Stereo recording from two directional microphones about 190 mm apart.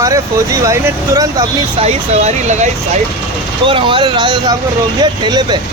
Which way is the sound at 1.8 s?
35° right (ahead or behind).